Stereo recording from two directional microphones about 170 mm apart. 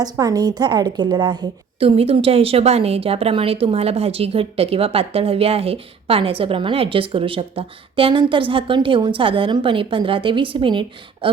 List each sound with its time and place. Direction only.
0.0 s a woman's voice: 20° right (ahead or behind)